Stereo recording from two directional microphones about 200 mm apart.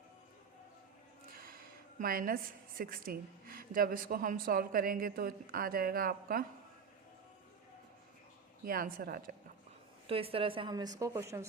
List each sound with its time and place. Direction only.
2.0 s a woman's voice: 45° right (ahead or behind)
8.6 s a woman's voice: 45° right (ahead or behind)
10.1 s a woman's voice: 30° right (ahead or behind)